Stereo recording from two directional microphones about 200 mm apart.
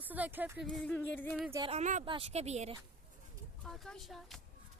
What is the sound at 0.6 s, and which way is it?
Speech, 5° left (ahead or behind).